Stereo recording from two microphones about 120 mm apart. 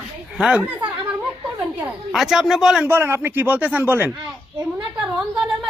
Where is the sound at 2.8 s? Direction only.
20° right (ahead or behind).